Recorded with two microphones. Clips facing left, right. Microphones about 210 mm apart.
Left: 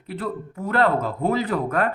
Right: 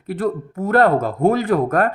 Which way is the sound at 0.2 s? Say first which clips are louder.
Right 7 dB; 45° right (ahead or behind).